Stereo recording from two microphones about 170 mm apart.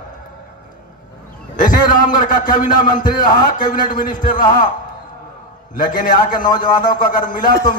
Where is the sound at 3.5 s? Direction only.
50° left (ahead or behind).